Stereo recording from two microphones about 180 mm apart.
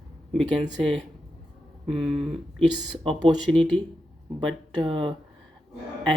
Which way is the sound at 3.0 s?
30° right (ahead or behind).